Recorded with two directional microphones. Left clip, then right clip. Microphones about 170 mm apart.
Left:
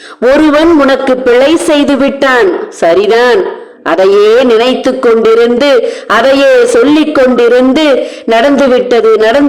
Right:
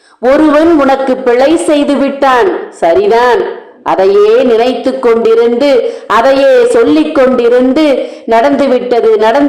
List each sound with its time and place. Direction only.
0.3 s a man's voice: 30° left (ahead or behind)